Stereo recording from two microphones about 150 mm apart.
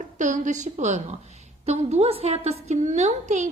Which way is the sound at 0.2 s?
55° right (ahead or behind).